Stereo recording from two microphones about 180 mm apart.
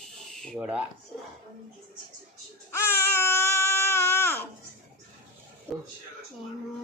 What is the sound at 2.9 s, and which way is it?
Baby cry, 15° left (ahead or behind).